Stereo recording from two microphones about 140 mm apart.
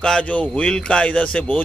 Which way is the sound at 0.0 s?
5° left (ahead or behind).